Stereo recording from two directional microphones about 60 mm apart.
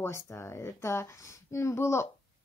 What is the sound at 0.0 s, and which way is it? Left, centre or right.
A woman's voice, left.